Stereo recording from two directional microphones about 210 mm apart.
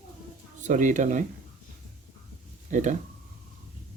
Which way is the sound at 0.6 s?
35° right (ahead or behind).